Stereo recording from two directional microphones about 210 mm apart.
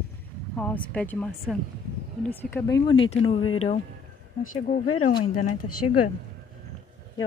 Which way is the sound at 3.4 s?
85° left.